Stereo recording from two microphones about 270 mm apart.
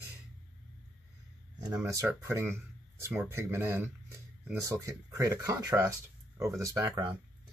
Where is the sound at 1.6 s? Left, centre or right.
Centre.